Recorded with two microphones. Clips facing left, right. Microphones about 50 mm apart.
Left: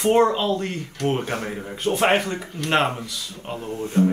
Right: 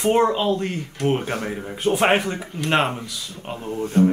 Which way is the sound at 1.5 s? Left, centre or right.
Centre.